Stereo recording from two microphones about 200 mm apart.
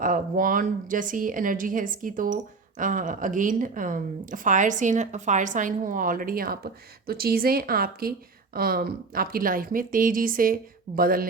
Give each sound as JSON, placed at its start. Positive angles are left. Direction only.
{"t": 0.0, "sound": "a woman's voice", "side_deg": -45}